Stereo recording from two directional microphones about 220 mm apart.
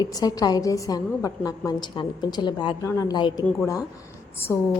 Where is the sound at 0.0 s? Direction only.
15° left (ahead or behind).